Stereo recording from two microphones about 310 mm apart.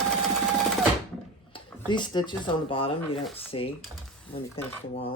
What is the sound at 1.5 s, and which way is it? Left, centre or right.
Speech, centre.